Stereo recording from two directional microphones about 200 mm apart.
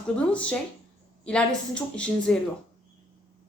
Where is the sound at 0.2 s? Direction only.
5° left (ahead or behind).